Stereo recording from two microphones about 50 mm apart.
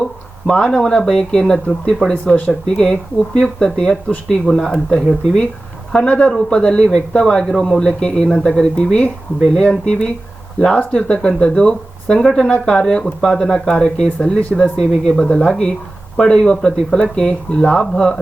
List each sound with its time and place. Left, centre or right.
0.5 s speech: centre
2.0 s speech: right
2.5 s speech: centre
5.9 s speech: left
12.4 s speech: left
12.6 s speech: centre